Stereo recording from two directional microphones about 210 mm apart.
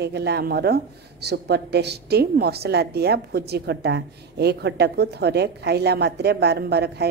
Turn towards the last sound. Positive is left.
turn(degrees=-50)  # may be behind; listen again after turning